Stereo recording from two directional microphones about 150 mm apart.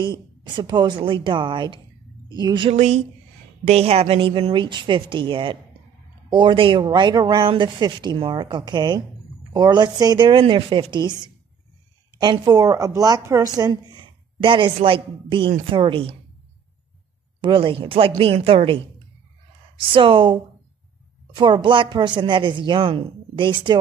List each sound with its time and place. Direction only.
0.0 s a woman's voice: 30° right (ahead or behind)
2.7 s a woman's voice: 50° right (ahead or behind)
17.4 s a woman's voice: 35° right (ahead or behind)
19.9 s a woman's voice: 35° right (ahead or behind)